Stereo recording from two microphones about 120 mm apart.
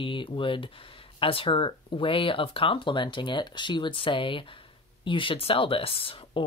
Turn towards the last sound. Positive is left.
turn(degrees=50)  # may be behind; listen again after turning